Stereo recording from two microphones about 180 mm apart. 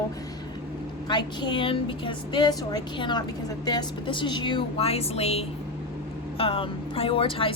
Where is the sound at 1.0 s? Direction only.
25° left (ahead or behind).